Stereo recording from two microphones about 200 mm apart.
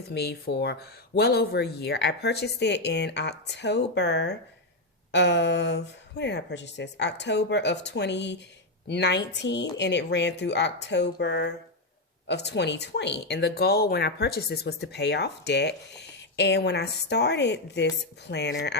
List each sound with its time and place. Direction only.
0.1 s speech: 55° left (ahead or behind)